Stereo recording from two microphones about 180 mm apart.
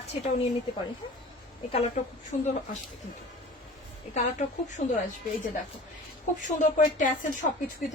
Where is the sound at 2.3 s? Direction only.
45° left (ahead or behind).